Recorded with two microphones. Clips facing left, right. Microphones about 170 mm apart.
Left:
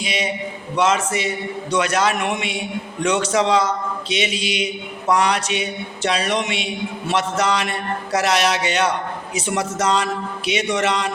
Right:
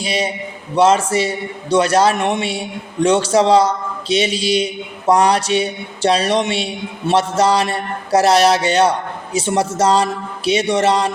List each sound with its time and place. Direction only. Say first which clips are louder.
0.0 s a man's voice: right 3 dB; 35° right (ahead or behind)